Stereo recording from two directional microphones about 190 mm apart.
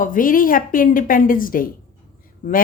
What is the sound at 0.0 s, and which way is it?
Speech, 45° left (ahead or behind).